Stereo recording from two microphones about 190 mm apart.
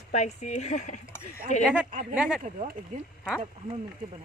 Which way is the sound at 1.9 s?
45° right (ahead or behind).